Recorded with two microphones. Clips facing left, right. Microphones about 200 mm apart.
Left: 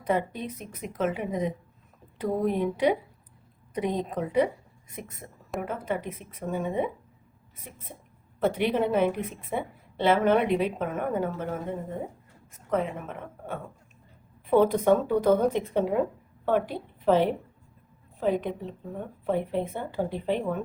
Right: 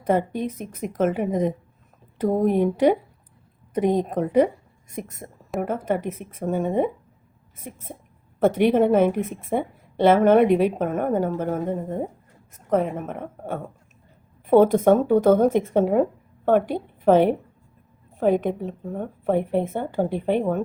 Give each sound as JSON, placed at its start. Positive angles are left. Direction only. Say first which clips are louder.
{"t": 0.0, "sound": "a woman's voice", "louder": "right 5 dB", "side_deg": -50}